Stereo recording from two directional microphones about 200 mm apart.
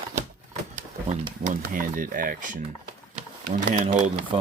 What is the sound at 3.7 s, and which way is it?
Speech, 40° right (ahead or behind).